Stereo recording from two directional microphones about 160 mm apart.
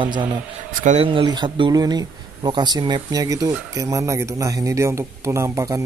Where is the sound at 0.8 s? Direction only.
50° right (ahead or behind).